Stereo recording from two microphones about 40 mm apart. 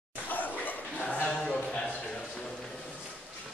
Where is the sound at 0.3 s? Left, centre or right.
Left.